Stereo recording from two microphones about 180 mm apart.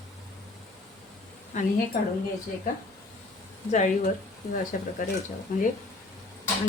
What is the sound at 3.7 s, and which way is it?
Speech, 45° left (ahead or behind).